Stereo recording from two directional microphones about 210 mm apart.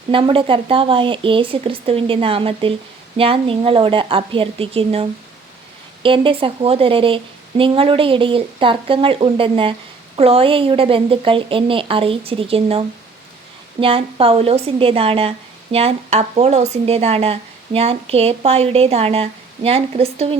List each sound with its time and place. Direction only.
0.1 s speech: 25° right (ahead or behind)